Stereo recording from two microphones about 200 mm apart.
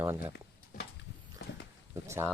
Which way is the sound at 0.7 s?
40° left (ahead or behind).